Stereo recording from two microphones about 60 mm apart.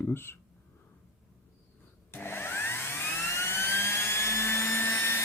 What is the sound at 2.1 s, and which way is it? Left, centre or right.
Vacuum cleaner, left.